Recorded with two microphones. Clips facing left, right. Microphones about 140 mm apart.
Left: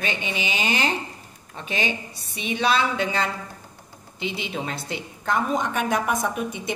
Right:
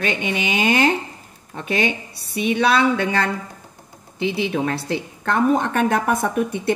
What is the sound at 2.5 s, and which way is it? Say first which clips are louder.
Speech: right 4 dB; 65° right (ahead or behind).